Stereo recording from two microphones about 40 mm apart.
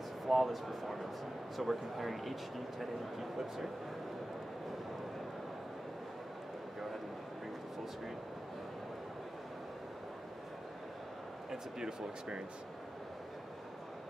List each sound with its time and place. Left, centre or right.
0.3 s speech: centre
11.5 s speech: right